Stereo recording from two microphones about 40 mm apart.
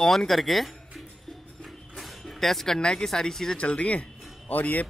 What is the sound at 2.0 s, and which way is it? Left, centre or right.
Music, centre.